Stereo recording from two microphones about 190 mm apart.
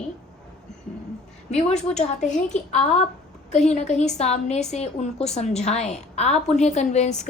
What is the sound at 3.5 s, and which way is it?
A woman's voice, 35° left (ahead or behind).